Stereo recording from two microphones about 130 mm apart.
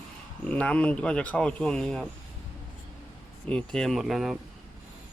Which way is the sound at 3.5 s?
5° left (ahead or behind).